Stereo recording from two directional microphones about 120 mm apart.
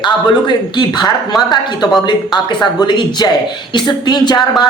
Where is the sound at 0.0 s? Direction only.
40° left (ahead or behind).